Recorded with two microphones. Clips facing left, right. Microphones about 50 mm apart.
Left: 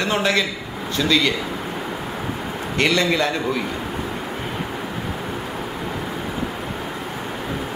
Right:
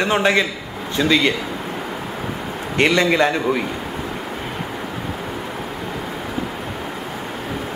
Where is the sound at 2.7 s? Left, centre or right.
Right.